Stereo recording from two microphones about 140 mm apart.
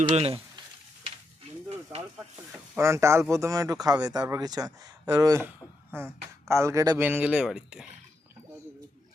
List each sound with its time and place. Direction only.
0.1 s speech: 50° right (ahead or behind)
2.1 s speech: 10° right (ahead or behind)
2.8 s speech: 20° right (ahead or behind)
7.0 s speech: 10° right (ahead or behind)